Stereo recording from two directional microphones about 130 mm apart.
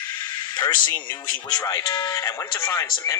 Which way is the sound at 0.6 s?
35° left (ahead or behind).